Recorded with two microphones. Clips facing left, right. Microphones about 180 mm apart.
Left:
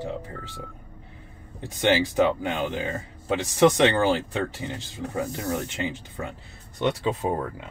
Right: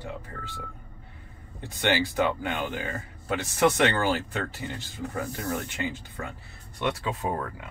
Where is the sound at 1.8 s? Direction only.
20° left (ahead or behind).